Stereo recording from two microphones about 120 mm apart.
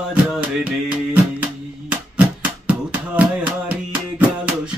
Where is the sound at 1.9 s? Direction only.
10° right (ahead or behind).